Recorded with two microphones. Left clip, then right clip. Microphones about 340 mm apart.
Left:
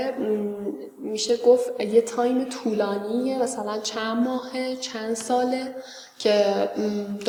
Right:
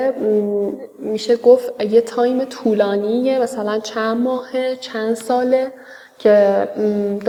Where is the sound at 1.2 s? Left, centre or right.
Right.